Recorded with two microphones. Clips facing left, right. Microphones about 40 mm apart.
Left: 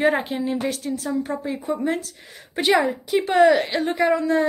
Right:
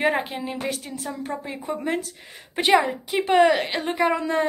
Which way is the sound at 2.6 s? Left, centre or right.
Centre.